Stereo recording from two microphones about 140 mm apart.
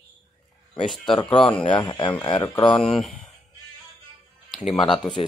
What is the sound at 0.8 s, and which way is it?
Speech, centre (ahead or behind).